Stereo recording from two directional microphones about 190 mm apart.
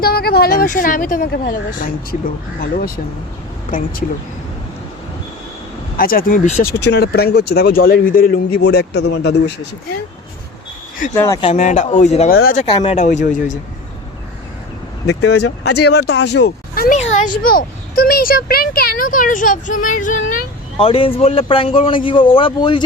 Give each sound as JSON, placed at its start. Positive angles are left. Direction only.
{"t": 0.0, "sound": "speech", "side_deg": 55}
{"t": 3.7, "sound": "speech", "side_deg": 45}
{"t": 6.0, "sound": "speech", "side_deg": 50}
{"t": 11.1, "sound": "speech", "side_deg": 15}
{"t": 11.5, "sound": "speech", "side_deg": 40}
{"t": 12.3, "sound": "speech", "side_deg": 55}
{"t": 12.5, "sound": "speech", "side_deg": 30}
{"t": 13.0, "sound": "speech", "side_deg": 40}
{"t": 15.4, "sound": "speech", "side_deg": 60}
{"t": 17.0, "sound": "speech", "side_deg": 35}
{"t": 20.7, "sound": "speech", "side_deg": 30}